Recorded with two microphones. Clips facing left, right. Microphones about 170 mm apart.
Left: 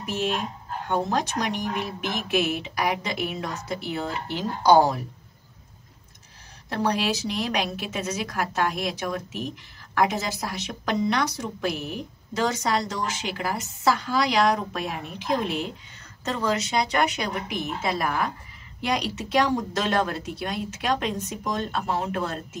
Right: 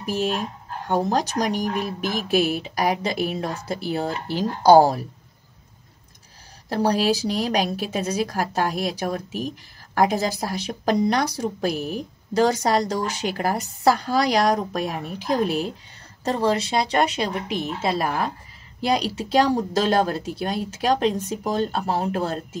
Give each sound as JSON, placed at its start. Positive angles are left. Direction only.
{"t": 0.0, "sound": "a woman's voice", "side_deg": -35}
{"t": 6.7, "sound": "a woman's voice", "side_deg": -35}